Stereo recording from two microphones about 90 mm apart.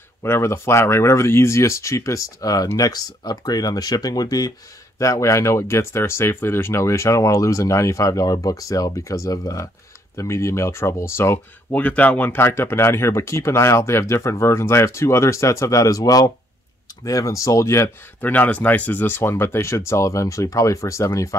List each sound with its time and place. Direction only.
0.2 s speech: 30° left (ahead or behind)
18.2 s speech: 20° left (ahead or behind); by 21.4 s 35° left (ahead or behind)